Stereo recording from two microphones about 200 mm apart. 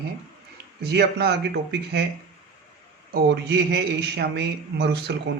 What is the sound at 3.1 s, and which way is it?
A man's voice, 55° right (ahead or behind).